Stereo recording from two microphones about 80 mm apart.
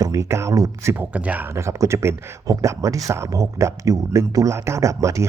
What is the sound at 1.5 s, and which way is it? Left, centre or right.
Speech, right.